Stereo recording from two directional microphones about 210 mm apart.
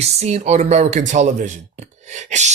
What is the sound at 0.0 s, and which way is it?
Speech, 30° right (ahead or behind).